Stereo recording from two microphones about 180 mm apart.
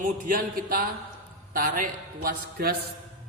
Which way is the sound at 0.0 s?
50° right (ahead or behind).